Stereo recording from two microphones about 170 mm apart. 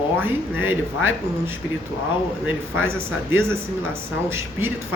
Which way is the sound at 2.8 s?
15° right (ahead or behind).